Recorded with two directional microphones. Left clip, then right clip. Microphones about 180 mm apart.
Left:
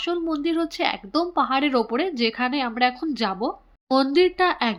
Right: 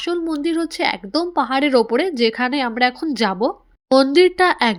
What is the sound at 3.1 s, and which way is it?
Speech, 35° right (ahead or behind).